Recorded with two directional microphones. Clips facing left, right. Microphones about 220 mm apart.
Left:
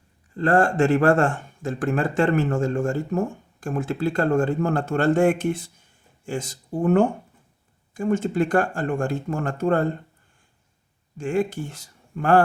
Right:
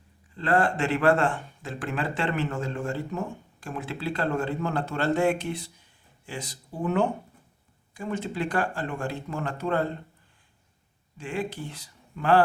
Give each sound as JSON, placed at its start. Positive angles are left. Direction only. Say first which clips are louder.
{"t": 0.3, "sound": "speech", "louder": "left 6 dB", "side_deg": 45}
{"t": 11.2, "sound": "speech", "louder": "left 8 dB", "side_deg": 45}